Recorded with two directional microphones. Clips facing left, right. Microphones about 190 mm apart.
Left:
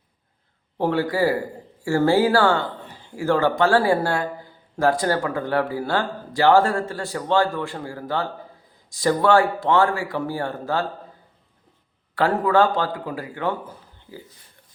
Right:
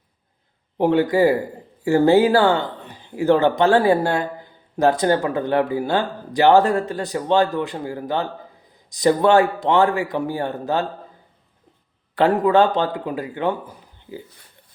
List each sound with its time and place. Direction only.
0.8 s speech: 20° right (ahead or behind)
12.1 s speech: 20° right (ahead or behind)